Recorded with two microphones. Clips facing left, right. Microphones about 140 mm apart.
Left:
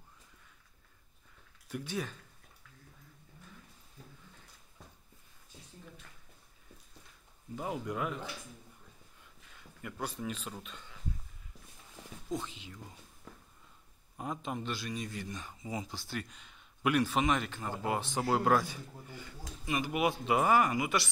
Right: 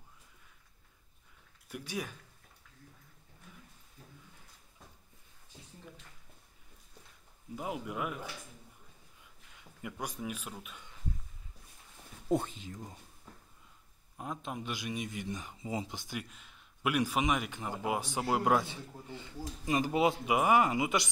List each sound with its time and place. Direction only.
1.7 s speech: 10° right (ahead or behind)
7.5 s speech: 5° right (ahead or behind)
9.8 s speech: 15° right (ahead or behind)
12.3 s speech: 55° right (ahead or behind)
14.1 s a man's voice: centre (ahead or behind)
14.6 s a man's voice: 15° right (ahead or behind)
20.2 s a man's voice: 15° right (ahead or behind)